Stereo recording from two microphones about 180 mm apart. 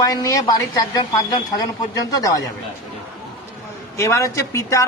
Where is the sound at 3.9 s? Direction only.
15° left (ahead or behind).